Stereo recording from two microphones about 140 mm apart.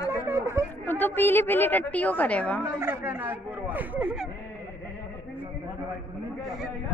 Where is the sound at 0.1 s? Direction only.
20° right (ahead or behind).